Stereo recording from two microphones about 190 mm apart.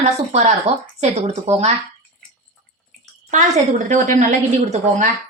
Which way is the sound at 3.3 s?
40° right (ahead or behind).